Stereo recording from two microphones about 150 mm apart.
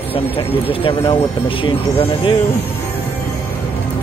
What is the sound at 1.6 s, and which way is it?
Speech, 35° left (ahead or behind).